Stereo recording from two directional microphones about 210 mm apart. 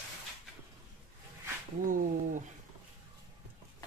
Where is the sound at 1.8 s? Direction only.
40° right (ahead or behind).